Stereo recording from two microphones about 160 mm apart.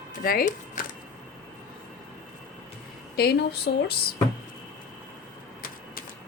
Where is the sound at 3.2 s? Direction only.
90° left.